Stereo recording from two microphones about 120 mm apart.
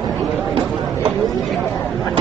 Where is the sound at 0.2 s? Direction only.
Centre (ahead or behind).